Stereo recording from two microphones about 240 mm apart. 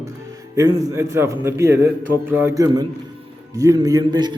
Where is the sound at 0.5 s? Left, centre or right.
Centre.